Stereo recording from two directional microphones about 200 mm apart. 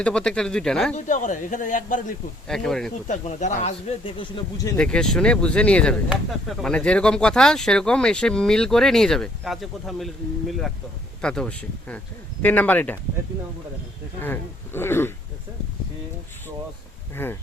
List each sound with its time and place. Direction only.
0.0 s speech: 5° left (ahead or behind)
0.9 s speech: 40° left (ahead or behind)
2.5 s speech: 5° left (ahead or behind)
3.1 s speech: 35° left (ahead or behind); by 4.7 s 20° left (ahead or behind)
4.8 s speech: 5° left (ahead or behind)
11.2 s speech: 5° left (ahead or behind)
14.2 s speech: 10° left (ahead or behind)
17.2 s speech: 10° left (ahead or behind)